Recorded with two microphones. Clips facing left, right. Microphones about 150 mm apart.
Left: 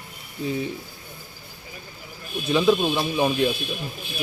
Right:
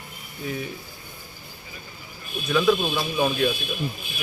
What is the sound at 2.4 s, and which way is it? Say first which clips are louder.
Speech: left 1 dB; 25° left (ahead or behind).